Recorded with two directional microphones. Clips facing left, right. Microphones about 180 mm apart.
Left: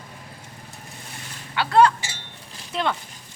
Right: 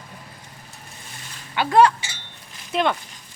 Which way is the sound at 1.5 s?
15° right (ahead or behind).